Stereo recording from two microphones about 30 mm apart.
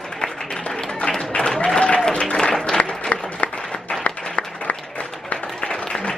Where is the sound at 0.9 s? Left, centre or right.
Left.